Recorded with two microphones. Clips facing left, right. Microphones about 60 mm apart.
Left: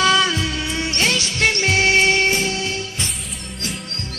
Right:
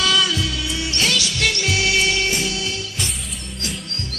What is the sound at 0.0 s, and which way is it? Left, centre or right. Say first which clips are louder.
Music: left 3 dB; left.